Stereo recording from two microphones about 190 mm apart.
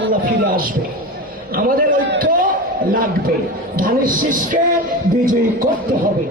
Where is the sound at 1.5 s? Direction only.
50° right (ahead or behind).